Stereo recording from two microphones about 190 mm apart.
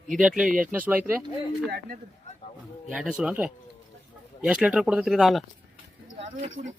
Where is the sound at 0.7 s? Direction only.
10° right (ahead or behind).